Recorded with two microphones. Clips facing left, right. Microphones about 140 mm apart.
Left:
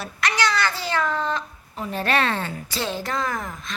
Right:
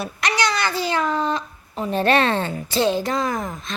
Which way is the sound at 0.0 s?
15° right (ahead or behind).